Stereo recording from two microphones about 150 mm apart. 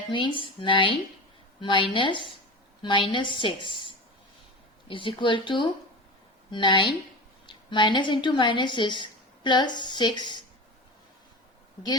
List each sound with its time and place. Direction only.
0.1 s a woman's voice: 35° left (ahead or behind)